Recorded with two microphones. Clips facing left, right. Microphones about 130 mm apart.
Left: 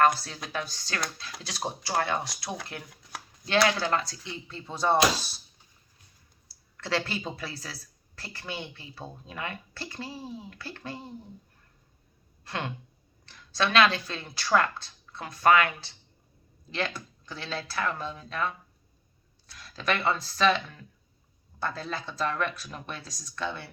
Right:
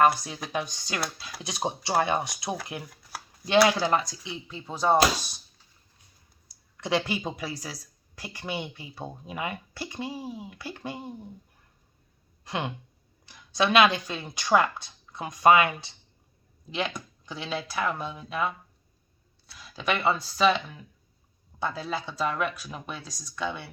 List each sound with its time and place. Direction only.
0.0 s speech: 10° right (ahead or behind)
2.9 s shuffling cards: 5° right (ahead or behind)
3.4 s speech: 15° right (ahead or behind)
6.7 s speech: 15° right (ahead or behind)
12.5 s speech: 15° right (ahead or behind)
16.7 s speech: 15° right (ahead or behind)